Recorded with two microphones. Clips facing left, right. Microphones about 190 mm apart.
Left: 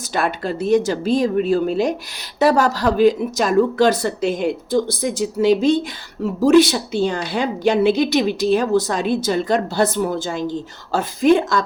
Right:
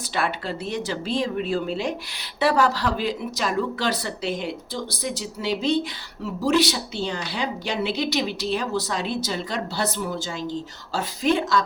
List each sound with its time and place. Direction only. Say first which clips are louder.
0.0 s speech: left 5 dB; 45° left (ahead or behind)